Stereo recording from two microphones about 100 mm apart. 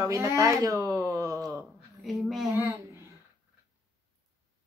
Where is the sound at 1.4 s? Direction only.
Centre (ahead or behind).